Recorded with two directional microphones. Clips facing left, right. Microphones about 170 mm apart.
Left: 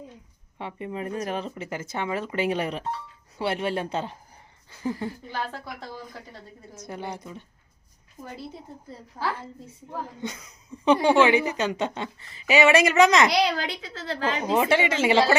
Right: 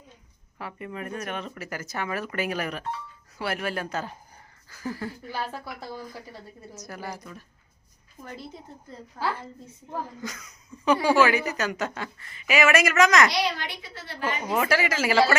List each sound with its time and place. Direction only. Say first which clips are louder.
0.6 s a woman's voice: left 3 dB; 25° left (ahead or behind)
5.3 s a woman's voice: even; 10° right (ahead or behind)
6.8 s a woman's voice: left 3 dB; 25° left (ahead or behind)
9.2 s a woman's voice: even; 10° left (ahead or behind)
10.2 s a woman's voice: left 3 dB; 30° left (ahead or behind)
13.3 s a woman's voice: left 4 dB; 80° left
14.4 s a woman's voice: left 3 dB; 25° left (ahead or behind)